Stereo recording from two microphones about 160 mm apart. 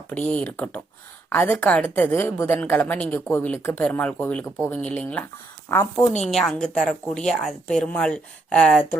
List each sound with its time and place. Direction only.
0.1 s a woman's voice: 10° left (ahead or behind)
6.2 s a woman's voice: 5° left (ahead or behind)